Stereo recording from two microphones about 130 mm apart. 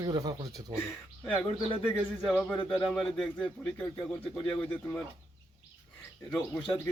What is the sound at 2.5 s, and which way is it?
Speech, 5° left (ahead or behind).